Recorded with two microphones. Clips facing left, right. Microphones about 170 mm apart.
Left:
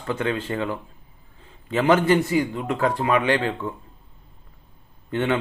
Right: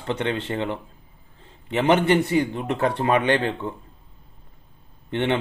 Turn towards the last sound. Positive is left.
turn(degrees=-25)  # may be behind; listen again after turning